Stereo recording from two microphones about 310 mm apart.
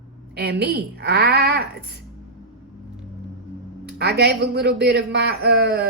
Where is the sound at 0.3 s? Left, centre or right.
Right.